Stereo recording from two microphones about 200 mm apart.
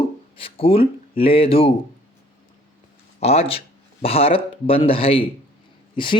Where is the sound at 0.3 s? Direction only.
30° left (ahead or behind).